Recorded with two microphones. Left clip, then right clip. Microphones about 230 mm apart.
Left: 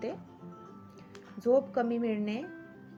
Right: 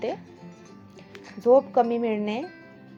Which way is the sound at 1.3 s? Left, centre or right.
Centre.